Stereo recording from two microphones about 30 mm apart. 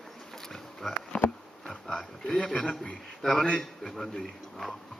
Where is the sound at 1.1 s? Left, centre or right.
Left.